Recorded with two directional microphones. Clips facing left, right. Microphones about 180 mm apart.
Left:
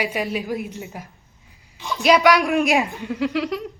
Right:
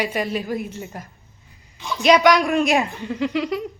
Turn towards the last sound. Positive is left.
turn(degrees=0)  # may be behind; listen again after turning